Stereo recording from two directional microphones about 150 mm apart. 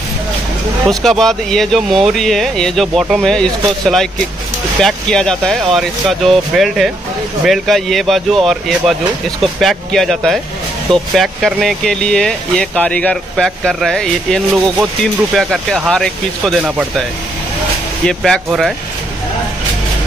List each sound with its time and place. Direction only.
0.8 s speech: centre (ahead or behind)
16.6 s speech: 10° right (ahead or behind)
18.0 s speech: 5° left (ahead or behind)